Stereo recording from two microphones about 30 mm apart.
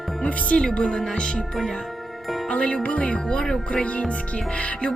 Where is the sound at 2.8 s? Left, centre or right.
Left.